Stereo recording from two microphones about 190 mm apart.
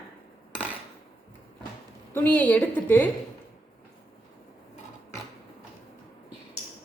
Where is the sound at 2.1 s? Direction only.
10° left (ahead or behind).